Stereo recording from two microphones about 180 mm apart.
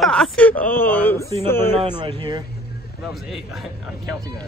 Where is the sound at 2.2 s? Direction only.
25° right (ahead or behind).